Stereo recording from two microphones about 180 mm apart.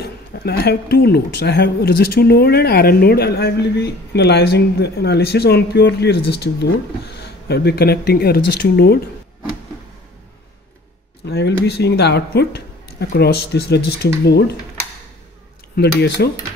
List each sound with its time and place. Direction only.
0.0 s speech: 60° left (ahead or behind)
11.2 s speech: 70° left (ahead or behind)
15.7 s speech: 65° left (ahead or behind)